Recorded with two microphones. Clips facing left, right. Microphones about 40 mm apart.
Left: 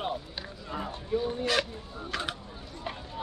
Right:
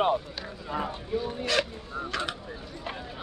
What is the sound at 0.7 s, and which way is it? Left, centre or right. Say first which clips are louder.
Speech: right 5 dB; centre.